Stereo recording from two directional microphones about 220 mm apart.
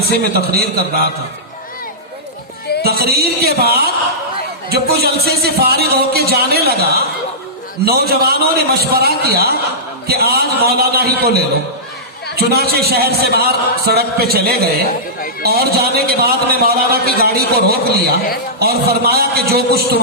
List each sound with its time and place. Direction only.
0.0 s a man's voice: 45° right (ahead or behind)
2.8 s a man's voice: 45° right (ahead or behind)